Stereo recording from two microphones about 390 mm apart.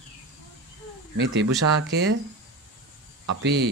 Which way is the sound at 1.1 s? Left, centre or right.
Right.